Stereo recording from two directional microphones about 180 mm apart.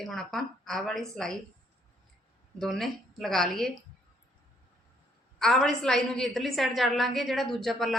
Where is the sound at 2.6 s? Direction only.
Centre (ahead or behind).